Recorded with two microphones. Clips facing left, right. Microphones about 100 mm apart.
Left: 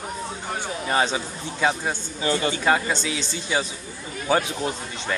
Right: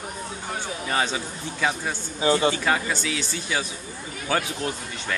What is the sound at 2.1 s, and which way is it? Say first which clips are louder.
Speech: right 4 dB; 20° right (ahead or behind).